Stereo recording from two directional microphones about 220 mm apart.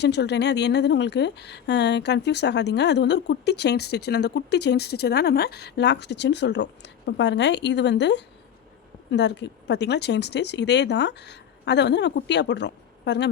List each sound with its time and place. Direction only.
0.0 s speech: 50° left (ahead or behind)